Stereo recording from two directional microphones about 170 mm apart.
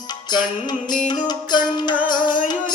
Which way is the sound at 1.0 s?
25° left (ahead or behind).